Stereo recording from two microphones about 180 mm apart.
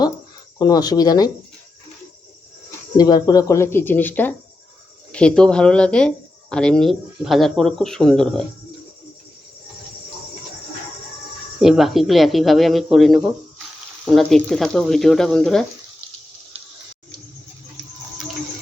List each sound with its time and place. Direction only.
0.6 s speech: 20° left (ahead or behind)
3.0 s speech: 20° left (ahead or behind); by 8.4 s 5° left (ahead or behind)
11.6 s speech: centre (ahead or behind)